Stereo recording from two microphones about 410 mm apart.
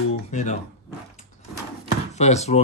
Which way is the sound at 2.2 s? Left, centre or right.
Centre.